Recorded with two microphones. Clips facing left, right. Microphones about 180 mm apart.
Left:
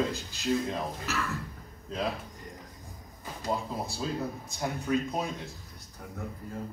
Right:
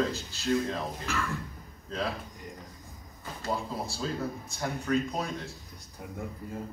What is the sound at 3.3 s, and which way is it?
Speech, 15° left (ahead or behind).